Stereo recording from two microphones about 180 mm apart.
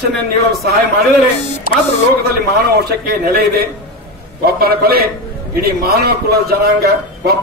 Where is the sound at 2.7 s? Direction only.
60° right (ahead or behind).